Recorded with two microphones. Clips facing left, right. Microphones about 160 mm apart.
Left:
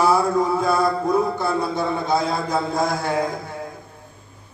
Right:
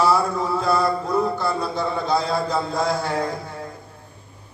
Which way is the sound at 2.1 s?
20° left (ahead or behind).